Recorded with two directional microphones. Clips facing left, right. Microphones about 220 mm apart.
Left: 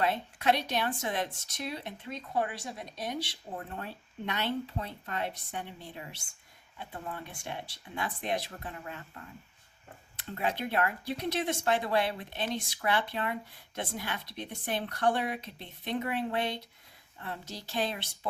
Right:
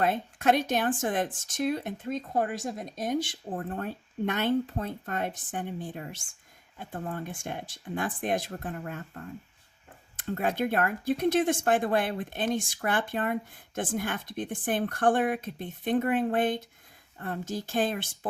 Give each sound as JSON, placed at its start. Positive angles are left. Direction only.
{"t": 0.0, "sound": "speech", "side_deg": -50}